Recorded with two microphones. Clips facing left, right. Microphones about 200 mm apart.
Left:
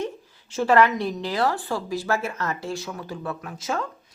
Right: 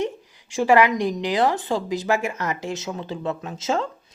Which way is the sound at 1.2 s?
15° right (ahead or behind).